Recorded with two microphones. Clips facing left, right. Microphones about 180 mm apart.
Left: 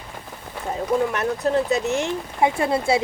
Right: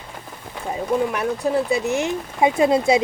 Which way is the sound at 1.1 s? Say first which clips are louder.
Even; 10° right (ahead or behind).